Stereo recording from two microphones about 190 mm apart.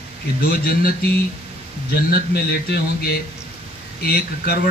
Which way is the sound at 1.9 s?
55° left (ahead or behind).